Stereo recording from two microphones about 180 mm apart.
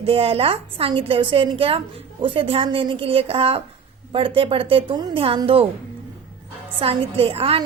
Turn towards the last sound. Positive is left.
turn(degrees=-30)  # may be behind; listen again after turning